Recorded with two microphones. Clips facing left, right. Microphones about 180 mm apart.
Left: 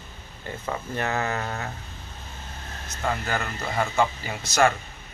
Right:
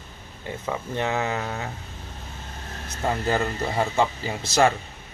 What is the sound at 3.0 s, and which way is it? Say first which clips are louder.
Speech: right 4 dB; 25° right (ahead or behind).